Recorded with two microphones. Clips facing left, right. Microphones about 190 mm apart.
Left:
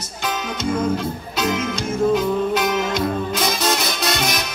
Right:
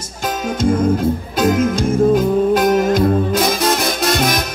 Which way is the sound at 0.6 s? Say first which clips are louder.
Right 6 dB; 50° right (ahead or behind).